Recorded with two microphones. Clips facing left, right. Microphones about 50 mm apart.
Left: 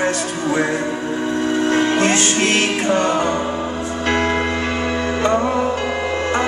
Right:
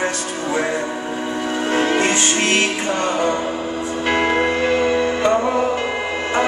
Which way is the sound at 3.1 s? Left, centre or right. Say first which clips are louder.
Left 1 dB; left.